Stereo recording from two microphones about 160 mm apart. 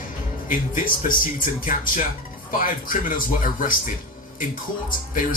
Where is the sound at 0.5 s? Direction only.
60° left (ahead or behind).